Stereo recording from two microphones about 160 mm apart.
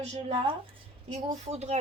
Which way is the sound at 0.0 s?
40° right (ahead or behind).